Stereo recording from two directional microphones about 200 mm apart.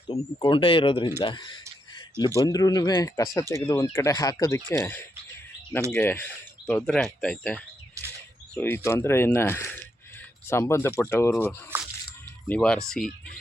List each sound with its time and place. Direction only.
0.1 s speech: 25° left (ahead or behind); by 11.5 s 10° left (ahead or behind)
11.7 s squish: 10° right (ahead or behind)
12.5 s speech: 5° left (ahead or behind)